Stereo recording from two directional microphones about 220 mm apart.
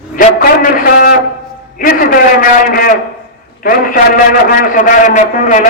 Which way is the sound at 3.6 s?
35° left (ahead or behind).